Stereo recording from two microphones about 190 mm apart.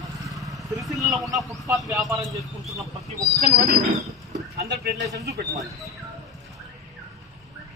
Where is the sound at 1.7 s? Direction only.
15° right (ahead or behind).